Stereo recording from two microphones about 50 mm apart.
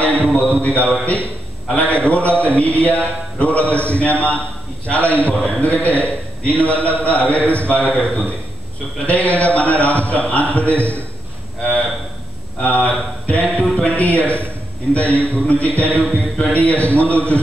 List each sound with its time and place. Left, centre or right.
0.0 s a man's voice: left
12.6 s a man's voice: left